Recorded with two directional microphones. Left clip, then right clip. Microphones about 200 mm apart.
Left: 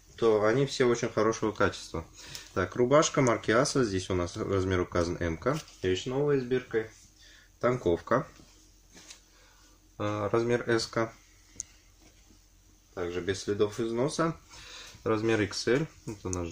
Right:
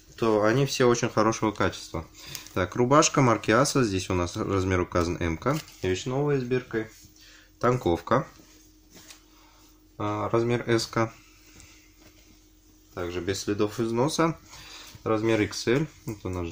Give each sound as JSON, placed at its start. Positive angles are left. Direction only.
{"t": 0.1, "sound": "speech", "side_deg": -45}
{"t": 1.5, "sound": "speech", "side_deg": -20}
{"t": 2.5, "sound": "speech", "side_deg": -35}
{"t": 9.9, "sound": "speech", "side_deg": -10}
{"t": 10.7, "sound": "speech", "side_deg": -35}
{"t": 12.9, "sound": "speech", "side_deg": -40}
{"t": 15.0, "sound": "speech", "side_deg": -10}